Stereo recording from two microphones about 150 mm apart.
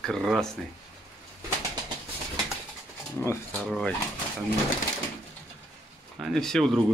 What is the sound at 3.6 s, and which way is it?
Speech, centre (ahead or behind).